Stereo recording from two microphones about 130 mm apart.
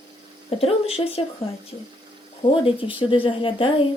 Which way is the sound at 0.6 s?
50° left (ahead or behind).